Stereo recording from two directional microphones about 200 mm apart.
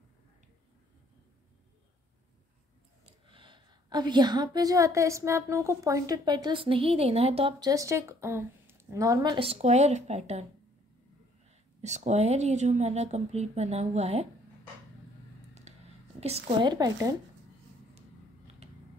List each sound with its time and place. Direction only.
3.3 s a woman's voice: 25° right (ahead or behind)
11.8 s speech: 35° right (ahead or behind)
15.7 s whispering: 35° right (ahead or behind)
16.2 s speech: 30° right (ahead or behind)
16.7 s a woman's voice: 20° right (ahead or behind)
18.6 s a sound: 35° right (ahead or behind)